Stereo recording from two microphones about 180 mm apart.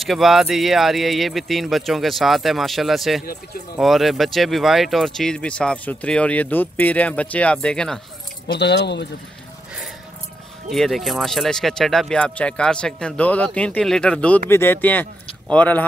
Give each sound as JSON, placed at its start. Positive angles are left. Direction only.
{"t": 0.0, "sound": "speech", "side_deg": 0}
{"t": 8.5, "sound": "speech", "side_deg": 70}
{"t": 10.7, "sound": "speech", "side_deg": 0}